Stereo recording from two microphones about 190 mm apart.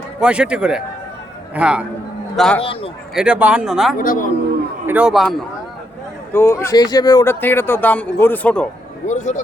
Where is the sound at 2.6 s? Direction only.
30° left (ahead or behind).